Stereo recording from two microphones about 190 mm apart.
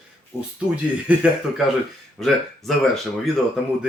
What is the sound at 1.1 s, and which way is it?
Speech, 10° right (ahead or behind).